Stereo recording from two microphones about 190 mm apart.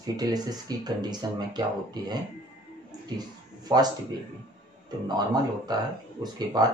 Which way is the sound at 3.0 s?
20° right (ahead or behind).